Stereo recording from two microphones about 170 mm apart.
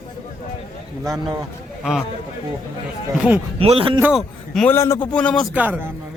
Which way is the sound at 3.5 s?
35° right (ahead or behind).